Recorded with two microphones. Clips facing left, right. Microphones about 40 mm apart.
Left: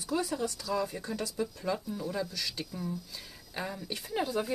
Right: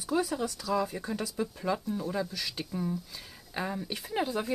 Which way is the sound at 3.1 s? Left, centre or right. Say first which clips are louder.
Right 3 dB; centre.